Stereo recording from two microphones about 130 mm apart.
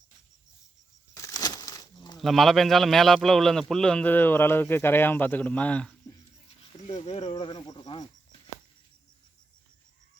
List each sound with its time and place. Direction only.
1.1 s a sound: 30° left (ahead or behind)
2.1 s speech: centre (ahead or behind)
6.8 s speech: 55° left (ahead or behind)
7.3 s speech: 30° left (ahead or behind)